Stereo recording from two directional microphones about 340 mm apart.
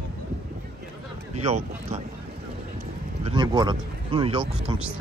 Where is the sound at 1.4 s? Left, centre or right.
Centre.